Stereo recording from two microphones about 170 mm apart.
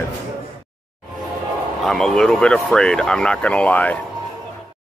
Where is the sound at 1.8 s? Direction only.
5° left (ahead or behind).